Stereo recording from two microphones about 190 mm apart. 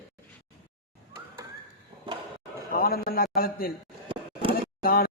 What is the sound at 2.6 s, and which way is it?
A man's voice, 50° left (ahead or behind).